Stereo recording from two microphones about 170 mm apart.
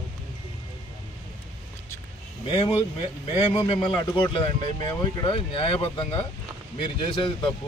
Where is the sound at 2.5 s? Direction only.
30° left (ahead or behind).